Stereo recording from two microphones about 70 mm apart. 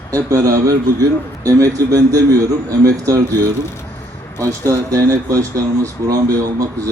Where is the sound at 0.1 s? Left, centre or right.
Right.